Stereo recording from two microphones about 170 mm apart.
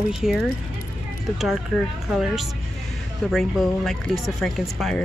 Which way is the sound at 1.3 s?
Centre (ahead or behind).